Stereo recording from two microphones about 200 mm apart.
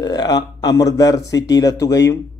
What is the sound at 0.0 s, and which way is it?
Speech, 20° left (ahead or behind).